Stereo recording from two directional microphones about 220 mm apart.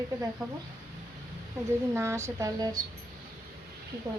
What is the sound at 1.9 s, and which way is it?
Speech, 10° right (ahead or behind).